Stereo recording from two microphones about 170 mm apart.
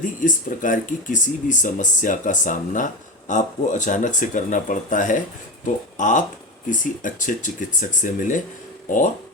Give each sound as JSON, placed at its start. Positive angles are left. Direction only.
{"t": 0.0, "sound": "speech", "side_deg": 50}